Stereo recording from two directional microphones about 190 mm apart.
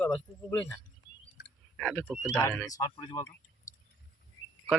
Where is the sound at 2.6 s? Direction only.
20° left (ahead or behind).